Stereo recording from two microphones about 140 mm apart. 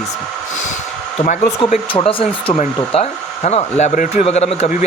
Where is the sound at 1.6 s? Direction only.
35° left (ahead or behind).